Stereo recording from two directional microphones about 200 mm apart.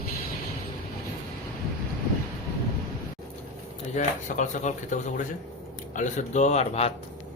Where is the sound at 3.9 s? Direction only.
35° left (ahead or behind).